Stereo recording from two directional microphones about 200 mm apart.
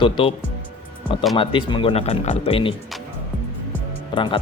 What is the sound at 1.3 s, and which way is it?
Speech, 25° left (ahead or behind).